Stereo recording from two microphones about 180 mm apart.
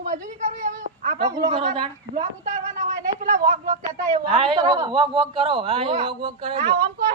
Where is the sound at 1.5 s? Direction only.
35° right (ahead or behind).